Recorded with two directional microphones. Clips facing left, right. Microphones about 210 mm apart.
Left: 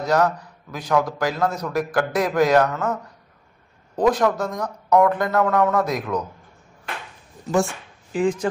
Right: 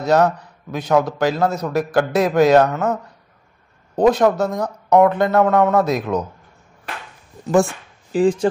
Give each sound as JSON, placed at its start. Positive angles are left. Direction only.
{"t": 0.0, "sound": "a man's voice", "side_deg": -25}
{"t": 3.9, "sound": "a man's voice", "side_deg": -25}
{"t": 8.1, "sound": "speech", "side_deg": -35}